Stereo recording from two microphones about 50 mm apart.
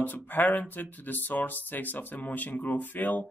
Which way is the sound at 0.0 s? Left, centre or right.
Left.